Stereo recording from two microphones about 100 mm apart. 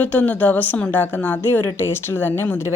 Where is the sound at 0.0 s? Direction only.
15° left (ahead or behind).